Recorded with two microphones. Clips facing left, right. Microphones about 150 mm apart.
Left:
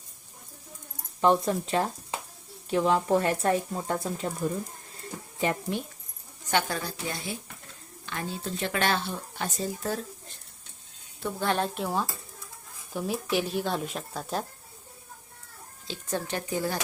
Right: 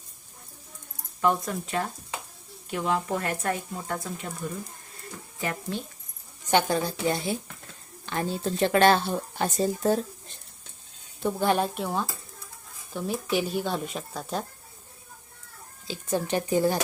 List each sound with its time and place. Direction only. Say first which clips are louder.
1.2 s speech: left 3 dB; 30° left (ahead or behind)
5.7 s speech: left 1 dB; 15° left (ahead or behind)
6.5 s a woman's voice: right 5 dB; 20° right (ahead or behind)
8.0 s speech: right 6 dB; 35° right (ahead or behind)
11.2 s speech: right 4 dB; 15° right (ahead or behind); by 14.4 s centre (ahead or behind)
16.0 s speech: right 5 dB; 15° right (ahead or behind)